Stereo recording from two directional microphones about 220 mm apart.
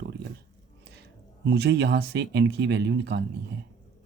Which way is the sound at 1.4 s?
50° right (ahead or behind).